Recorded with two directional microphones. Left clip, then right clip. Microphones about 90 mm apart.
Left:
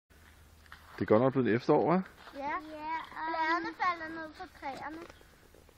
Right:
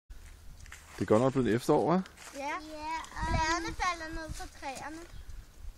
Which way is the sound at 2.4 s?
35° right (ahead or behind).